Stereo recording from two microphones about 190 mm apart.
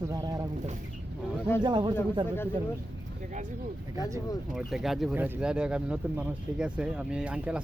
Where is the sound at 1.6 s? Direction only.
25° right (ahead or behind).